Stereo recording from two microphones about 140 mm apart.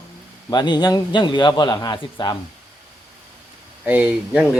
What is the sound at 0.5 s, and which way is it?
A man's voice, 30° left (ahead or behind).